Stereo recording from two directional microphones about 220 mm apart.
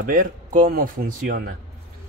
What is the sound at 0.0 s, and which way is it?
Speech, 40° right (ahead or behind).